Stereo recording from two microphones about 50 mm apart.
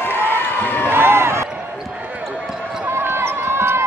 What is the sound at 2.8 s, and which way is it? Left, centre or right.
Basketball bounce, right.